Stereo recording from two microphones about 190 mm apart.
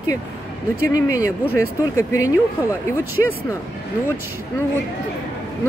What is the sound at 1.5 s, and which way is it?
Speech, 15° left (ahead or behind).